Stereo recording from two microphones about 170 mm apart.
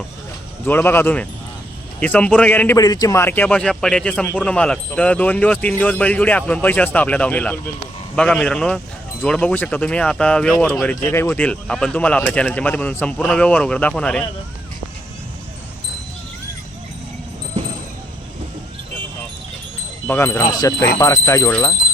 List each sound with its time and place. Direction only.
0.6 s a man's voice: 10° left (ahead or behind)
20.1 s wind chime: 15° left (ahead or behind)
21.0 s a man's voice: 15° left (ahead or behind)